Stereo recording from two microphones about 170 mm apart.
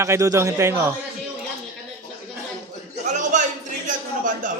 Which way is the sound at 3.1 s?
45° right (ahead or behind).